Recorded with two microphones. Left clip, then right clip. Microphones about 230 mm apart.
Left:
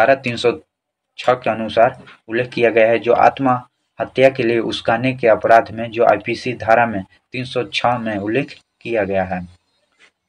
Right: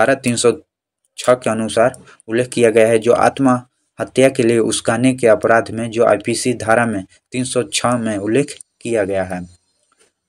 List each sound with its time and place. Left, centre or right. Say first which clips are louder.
0.0 s speech: even; right